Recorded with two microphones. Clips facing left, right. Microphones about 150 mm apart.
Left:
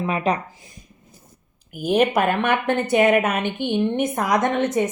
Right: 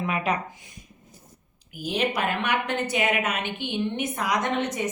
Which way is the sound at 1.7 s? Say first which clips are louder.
Left 8 dB; 50° left (ahead or behind).